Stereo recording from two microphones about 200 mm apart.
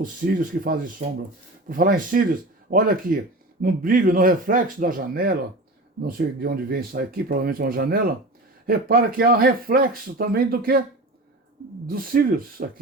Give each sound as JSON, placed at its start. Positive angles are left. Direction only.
{"t": 0.0, "sound": "speech", "side_deg": -45}
{"t": 11.9, "sound": "speech", "side_deg": -45}